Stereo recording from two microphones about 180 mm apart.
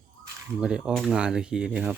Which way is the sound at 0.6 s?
5° right (ahead or behind).